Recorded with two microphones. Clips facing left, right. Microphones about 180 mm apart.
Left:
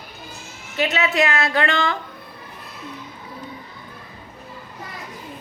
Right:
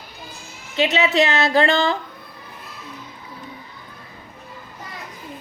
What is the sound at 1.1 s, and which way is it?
Music, 35° right (ahead or behind).